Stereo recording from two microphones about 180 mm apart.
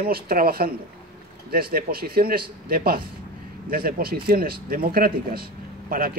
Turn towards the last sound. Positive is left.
turn(degrees=-55)  # may be behind; listen again after turning